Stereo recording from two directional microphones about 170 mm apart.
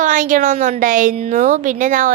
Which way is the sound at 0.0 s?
50° right (ahead or behind).